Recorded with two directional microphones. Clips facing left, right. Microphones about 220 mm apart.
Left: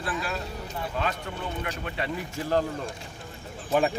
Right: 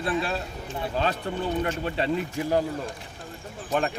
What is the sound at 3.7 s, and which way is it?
Speech, centre (ahead or behind).